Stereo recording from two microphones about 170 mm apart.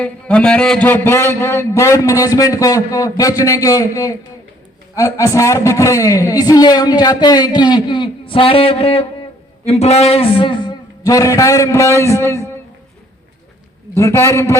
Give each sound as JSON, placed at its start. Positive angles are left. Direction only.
{"t": 0.0, "sound": "a man's voice", "side_deg": 5}
{"t": 13.9, "sound": "a man's voice", "side_deg": 15}